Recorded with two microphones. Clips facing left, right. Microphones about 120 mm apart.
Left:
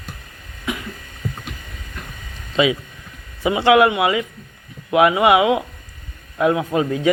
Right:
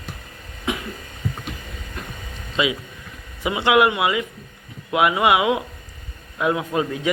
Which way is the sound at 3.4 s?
30° left (ahead or behind).